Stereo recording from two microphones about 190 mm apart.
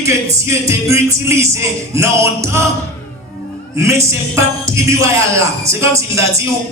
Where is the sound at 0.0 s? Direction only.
15° right (ahead or behind).